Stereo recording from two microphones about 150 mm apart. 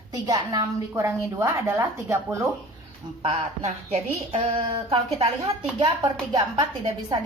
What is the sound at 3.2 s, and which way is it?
Speech, 45° right (ahead or behind).